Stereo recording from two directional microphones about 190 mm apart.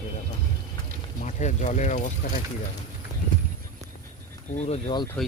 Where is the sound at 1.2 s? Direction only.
40° left (ahead or behind).